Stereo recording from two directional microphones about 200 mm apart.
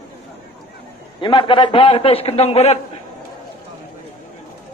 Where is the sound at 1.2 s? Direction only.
25° left (ahead or behind).